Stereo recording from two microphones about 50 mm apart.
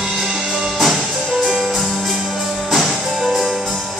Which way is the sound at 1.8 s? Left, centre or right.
Centre.